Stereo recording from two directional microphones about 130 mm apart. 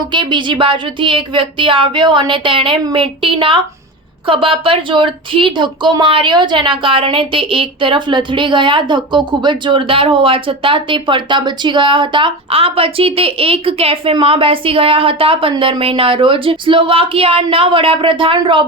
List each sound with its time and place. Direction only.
0.1 s a woman's voice: 35° right (ahead or behind)